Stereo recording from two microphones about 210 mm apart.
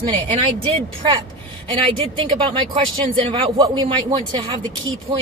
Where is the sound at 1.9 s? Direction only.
20° right (ahead or behind).